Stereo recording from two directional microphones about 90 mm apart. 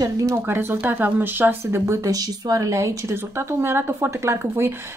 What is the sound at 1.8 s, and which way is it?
Speech, 40° right (ahead or behind).